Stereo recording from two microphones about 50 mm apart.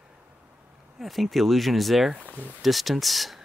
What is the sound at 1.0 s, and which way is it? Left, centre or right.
Speech, centre.